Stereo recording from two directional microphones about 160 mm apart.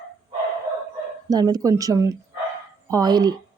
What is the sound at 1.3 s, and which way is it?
Speech, 25° right (ahead or behind).